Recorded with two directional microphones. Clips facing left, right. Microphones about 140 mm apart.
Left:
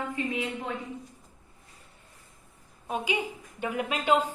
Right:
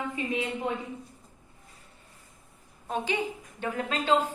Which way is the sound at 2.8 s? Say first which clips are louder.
Right 1 dB; 10° left (ahead or behind).